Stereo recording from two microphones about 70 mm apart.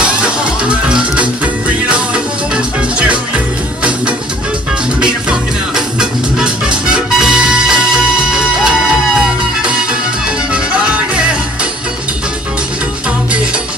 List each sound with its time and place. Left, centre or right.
0.0 s music: centre
5.8 s music: centre